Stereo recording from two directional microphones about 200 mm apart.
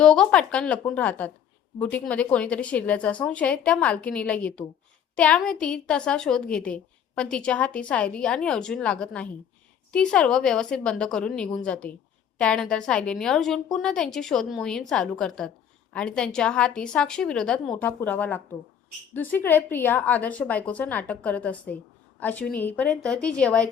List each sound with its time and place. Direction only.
0.0 s a woman's voice: 5° left (ahead or behind)